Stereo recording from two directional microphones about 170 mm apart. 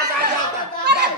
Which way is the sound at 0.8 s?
75° right (ahead or behind).